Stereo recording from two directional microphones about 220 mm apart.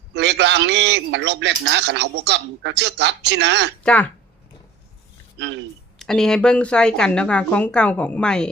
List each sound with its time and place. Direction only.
0.1 s a man's voice: 50° right (ahead or behind)
6.0 s speech: centre (ahead or behind)